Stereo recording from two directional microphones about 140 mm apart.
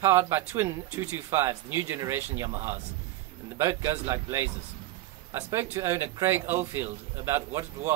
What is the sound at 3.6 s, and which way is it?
A man's voice, 20° right (ahead or behind).